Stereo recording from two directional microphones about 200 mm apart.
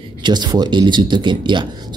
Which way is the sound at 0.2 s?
20° right (ahead or behind).